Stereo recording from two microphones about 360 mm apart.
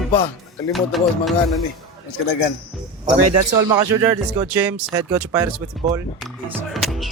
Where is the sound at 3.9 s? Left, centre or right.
Centre.